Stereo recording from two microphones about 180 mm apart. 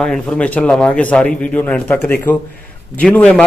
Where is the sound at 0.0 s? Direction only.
5° left (ahead or behind).